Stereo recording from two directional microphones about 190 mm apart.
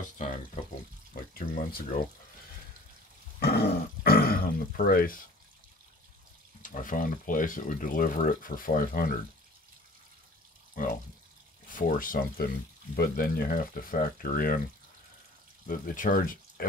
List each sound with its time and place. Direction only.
0.0 s speech: 40° left (ahead or behind)
3.3 s speech: 60° left (ahead or behind)
6.6 s speech: 45° left (ahead or behind)
11.7 s speech: 45° left (ahead or behind)
15.6 s speech: 45° left (ahead or behind)